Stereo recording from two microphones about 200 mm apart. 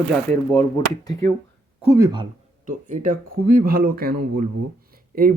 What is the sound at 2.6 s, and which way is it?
Speech, 40° right (ahead or behind).